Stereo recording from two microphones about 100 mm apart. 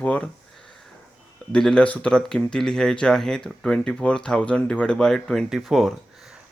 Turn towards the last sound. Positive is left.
turn(degrees=0)  # may be behind; listen again after turning